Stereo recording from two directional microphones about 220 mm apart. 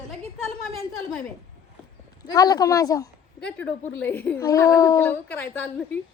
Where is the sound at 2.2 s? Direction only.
15° left (ahead or behind).